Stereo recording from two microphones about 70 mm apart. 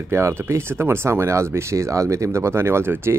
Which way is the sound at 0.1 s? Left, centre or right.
Right.